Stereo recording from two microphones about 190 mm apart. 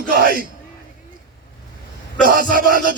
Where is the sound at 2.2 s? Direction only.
45° right (ahead or behind).